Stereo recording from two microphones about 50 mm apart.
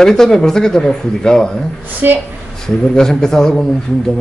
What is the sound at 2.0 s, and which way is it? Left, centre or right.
Speech, right.